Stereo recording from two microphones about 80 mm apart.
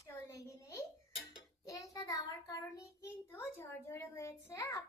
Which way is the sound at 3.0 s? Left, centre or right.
Left.